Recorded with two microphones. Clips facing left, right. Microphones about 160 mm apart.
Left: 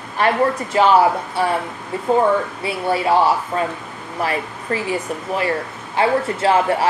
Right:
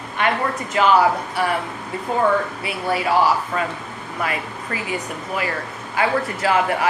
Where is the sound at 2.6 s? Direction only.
30° left (ahead or behind).